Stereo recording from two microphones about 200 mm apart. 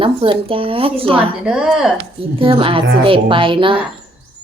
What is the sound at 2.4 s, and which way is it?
Speech, 25° right (ahead or behind).